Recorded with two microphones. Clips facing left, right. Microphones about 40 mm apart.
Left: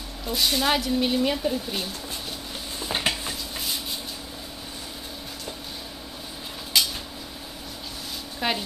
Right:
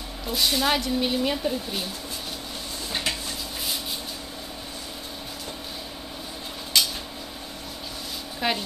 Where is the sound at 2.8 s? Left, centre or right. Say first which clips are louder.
Left 3 dB; left.